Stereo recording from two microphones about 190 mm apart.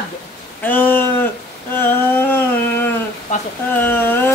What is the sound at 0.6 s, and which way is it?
Speech, 10° left (ahead or behind).